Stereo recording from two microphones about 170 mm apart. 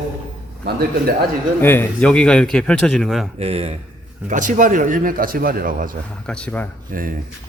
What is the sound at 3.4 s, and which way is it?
Speech, 35° right (ahead or behind).